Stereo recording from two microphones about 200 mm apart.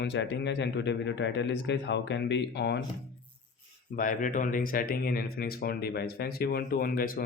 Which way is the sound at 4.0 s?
40° left (ahead or behind).